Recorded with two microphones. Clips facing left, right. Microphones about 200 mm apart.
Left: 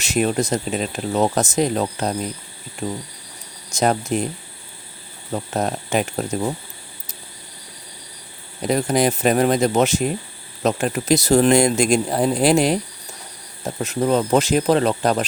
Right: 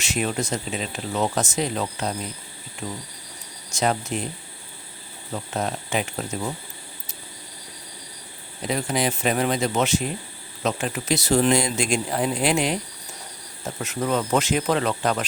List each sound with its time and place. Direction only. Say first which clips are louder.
0.0 s speech: left 6 dB; 40° left (ahead or behind)
5.3 s speech: left 5 dB; 45° left (ahead or behind)
8.6 s speech: left 6 dB; 45° left (ahead or behind)